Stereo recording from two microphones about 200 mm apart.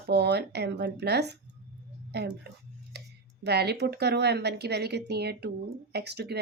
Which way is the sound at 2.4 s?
55° right (ahead or behind).